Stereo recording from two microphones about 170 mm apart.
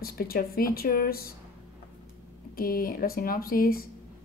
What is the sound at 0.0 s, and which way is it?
Speech, 60° left (ahead or behind).